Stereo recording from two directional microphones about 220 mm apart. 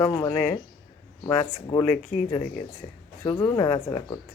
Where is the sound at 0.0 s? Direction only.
10° left (ahead or behind).